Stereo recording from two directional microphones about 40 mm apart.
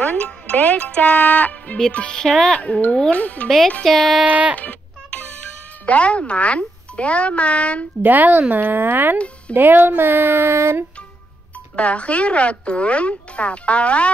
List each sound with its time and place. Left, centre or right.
0.0 s speech: left
1.9 s music: left
2.1 s speech: centre
2.6 s speech: left
2.9 s music: left
3.2 s speech: left
3.4 s speech: centre
4.2 s speech: right
4.6 s a sound: left
5.9 s speech: left
8.0 s speech: right
8.6 s speech: right
11.7 s speech: left